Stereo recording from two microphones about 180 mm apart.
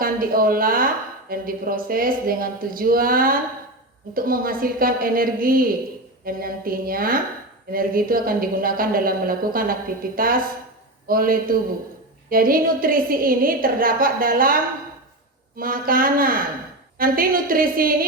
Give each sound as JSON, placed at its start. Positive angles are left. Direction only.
{"t": 0.0, "sound": "a woman's voice", "side_deg": -55}